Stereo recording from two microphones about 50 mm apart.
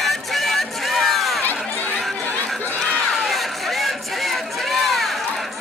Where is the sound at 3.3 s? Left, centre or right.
Centre.